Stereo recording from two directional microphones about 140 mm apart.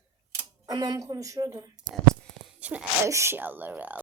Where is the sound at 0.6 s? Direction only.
25° right (ahead or behind).